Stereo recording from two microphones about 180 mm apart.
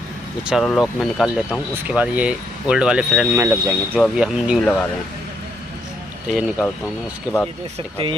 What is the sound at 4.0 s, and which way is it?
Speech, 5° right (ahead or behind).